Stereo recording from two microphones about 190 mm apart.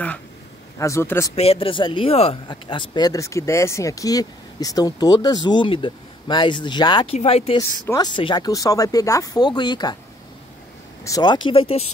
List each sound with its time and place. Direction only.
0.7 s speech: 15° left (ahead or behind)
1.3 s speech: 30° left (ahead or behind)
11.1 s speech: 20° left (ahead or behind)